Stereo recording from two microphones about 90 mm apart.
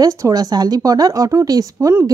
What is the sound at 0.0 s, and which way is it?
Speech, 40° right (ahead or behind).